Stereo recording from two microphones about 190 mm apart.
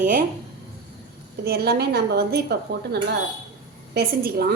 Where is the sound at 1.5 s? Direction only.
55° right (ahead or behind).